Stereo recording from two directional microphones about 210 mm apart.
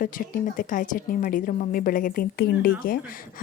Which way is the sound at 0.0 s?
40° left (ahead or behind).